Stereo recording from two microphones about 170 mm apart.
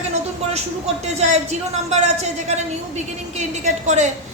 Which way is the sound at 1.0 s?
40° right (ahead or behind).